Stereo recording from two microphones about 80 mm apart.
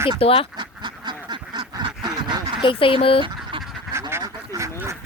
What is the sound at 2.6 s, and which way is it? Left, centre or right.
Speech, left.